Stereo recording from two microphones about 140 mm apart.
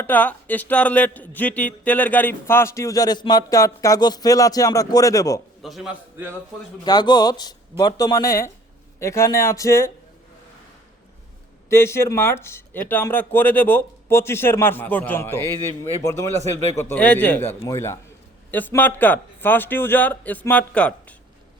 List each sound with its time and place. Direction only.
0.0 s speech: 10° left (ahead or behind)
5.6 s a man's voice: 5° right (ahead or behind)
6.8 s speech: 30° left (ahead or behind)
11.7 s speech: 20° left (ahead or behind)